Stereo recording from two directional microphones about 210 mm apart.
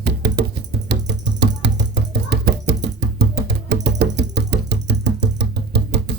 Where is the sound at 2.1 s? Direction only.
50° right (ahead or behind).